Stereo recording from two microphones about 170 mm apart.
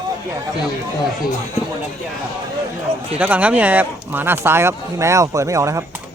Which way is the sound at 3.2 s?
10° right (ahead or behind).